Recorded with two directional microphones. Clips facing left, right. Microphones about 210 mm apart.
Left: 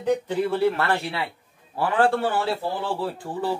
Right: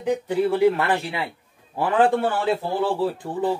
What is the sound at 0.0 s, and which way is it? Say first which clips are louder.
A man's voice: right 1 dB; 15° right (ahead or behind).